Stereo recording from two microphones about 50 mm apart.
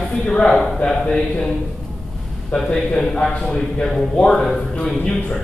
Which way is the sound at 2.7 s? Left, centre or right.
Centre.